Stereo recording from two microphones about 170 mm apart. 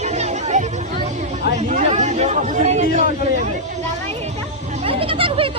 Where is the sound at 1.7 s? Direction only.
40° right (ahead or behind).